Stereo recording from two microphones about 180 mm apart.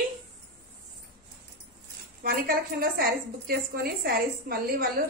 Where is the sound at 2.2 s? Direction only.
55° right (ahead or behind).